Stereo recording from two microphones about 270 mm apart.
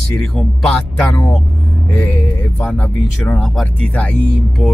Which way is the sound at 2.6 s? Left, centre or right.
Centre.